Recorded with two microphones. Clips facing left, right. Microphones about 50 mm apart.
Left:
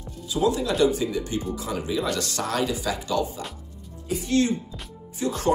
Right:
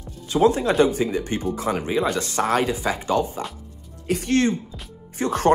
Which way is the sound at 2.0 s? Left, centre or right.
Right.